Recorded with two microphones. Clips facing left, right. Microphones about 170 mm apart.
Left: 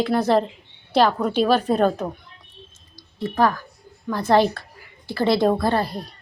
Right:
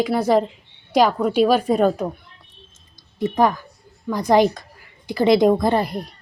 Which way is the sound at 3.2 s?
20° right (ahead or behind).